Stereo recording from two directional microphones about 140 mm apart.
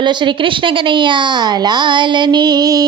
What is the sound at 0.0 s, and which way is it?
A woman's voice, 35° right (ahead or behind).